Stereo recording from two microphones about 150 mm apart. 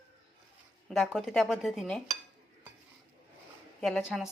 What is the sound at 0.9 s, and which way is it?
A woman's voice, centre (ahead or behind).